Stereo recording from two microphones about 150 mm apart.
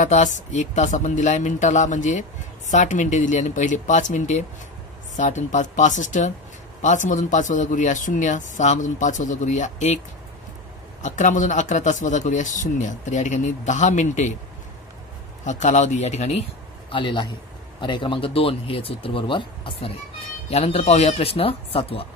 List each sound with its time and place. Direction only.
0.0 s speech: 55° left (ahead or behind)
11.0 s speech: 55° left (ahead or behind)
15.4 s speech: 50° left (ahead or behind)
16.9 s speech: 35° left (ahead or behind)